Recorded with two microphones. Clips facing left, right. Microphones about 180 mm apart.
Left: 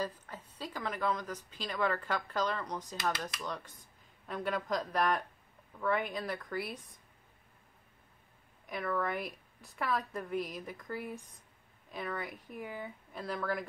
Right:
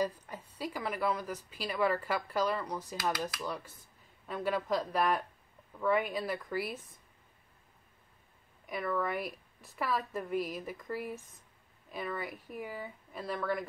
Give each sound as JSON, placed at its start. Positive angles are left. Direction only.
{"t": 0.0, "sound": "speech", "side_deg": -10}
{"t": 3.0, "sound": "speech", "side_deg": 25}
{"t": 3.3, "sound": "speech", "side_deg": -5}
{"t": 8.6, "sound": "speech", "side_deg": 0}